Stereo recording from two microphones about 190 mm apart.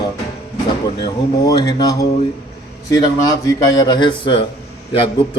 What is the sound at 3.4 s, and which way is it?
Mantra, 20° left (ahead or behind).